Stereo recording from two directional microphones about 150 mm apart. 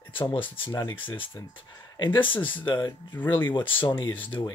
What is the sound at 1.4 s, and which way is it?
Speech, 15° left (ahead or behind).